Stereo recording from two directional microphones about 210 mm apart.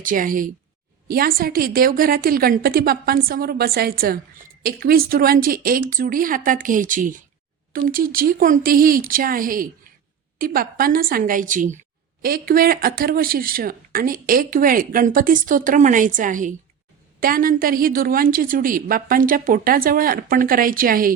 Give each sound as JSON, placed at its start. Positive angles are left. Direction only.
{"t": 0.0, "sound": "a woman's voice", "side_deg": -40}